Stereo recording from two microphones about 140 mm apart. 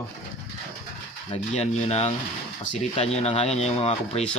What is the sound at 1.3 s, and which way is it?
Speech, 50° left (ahead or behind).